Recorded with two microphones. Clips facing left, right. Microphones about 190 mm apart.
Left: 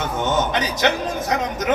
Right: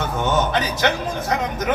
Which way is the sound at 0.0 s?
20° left (ahead or behind).